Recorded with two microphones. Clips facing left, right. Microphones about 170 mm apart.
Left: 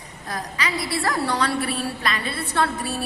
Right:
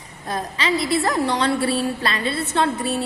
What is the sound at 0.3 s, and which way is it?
A woman's voice, 25° right (ahead or behind).